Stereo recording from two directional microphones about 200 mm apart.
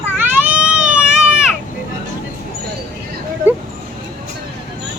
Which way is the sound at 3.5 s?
10° right (ahead or behind).